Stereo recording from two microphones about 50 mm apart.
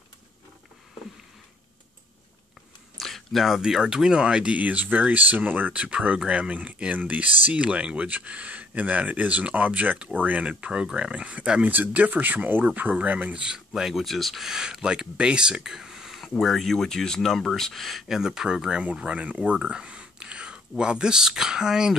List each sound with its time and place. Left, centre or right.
3.0 s speech: centre
4.6 s speech: right
5.7 s speech: right
10.5 s speech: centre
11.7 s speech: right; by 14.5 s centre
14.5 s speech: centre
16.3 s speech: centre
18.0 s speech: centre